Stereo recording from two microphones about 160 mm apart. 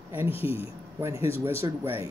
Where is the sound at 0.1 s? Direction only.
15° right (ahead or behind).